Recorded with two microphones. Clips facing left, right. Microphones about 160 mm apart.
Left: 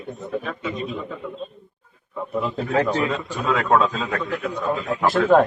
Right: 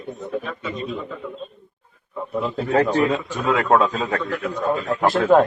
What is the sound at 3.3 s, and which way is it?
Speech, 50° right (ahead or behind).